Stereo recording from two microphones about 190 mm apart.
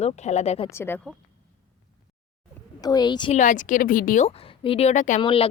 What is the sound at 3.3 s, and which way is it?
Speech, 40° left (ahead or behind).